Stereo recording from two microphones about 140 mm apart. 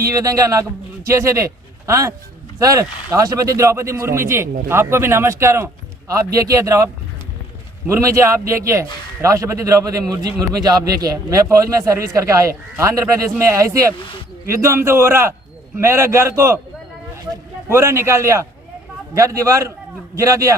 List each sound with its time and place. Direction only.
0.0 s a man's voice: 25° right (ahead or behind)
7.9 s a man's voice: 20° right (ahead or behind)
17.7 s a man's voice: 20° right (ahead or behind)